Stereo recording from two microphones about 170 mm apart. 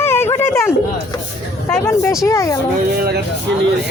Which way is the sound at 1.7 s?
15° left (ahead or behind).